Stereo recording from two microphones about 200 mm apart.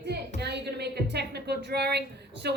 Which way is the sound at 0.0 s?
55° right (ahead or behind).